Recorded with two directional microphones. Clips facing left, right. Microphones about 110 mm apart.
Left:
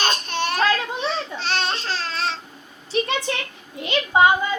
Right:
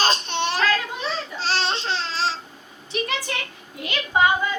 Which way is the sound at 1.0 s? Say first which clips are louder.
Left 1 dB; 35° right (ahead or behind).